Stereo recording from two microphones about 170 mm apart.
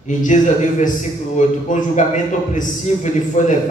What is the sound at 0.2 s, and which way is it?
A man's voice, 50° left (ahead or behind).